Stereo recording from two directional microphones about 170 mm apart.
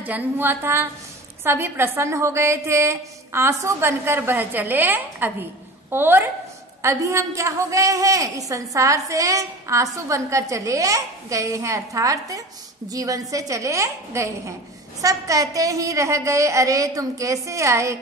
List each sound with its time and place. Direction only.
0.0 s a woman's voice: 10° right (ahead or behind)